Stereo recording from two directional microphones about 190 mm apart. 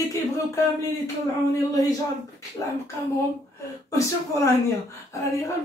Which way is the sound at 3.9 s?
15° left (ahead or behind).